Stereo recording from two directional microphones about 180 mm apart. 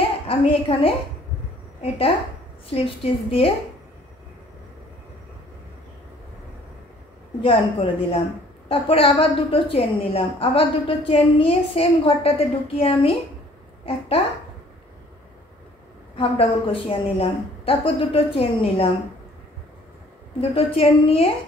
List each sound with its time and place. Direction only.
0.3 s a woman's voice: 30° left (ahead or behind)
7.4 s a woman's voice: 30° left (ahead or behind)
16.2 s a woman's voice: 30° left (ahead or behind)
20.3 s a woman's voice: 30° left (ahead or behind)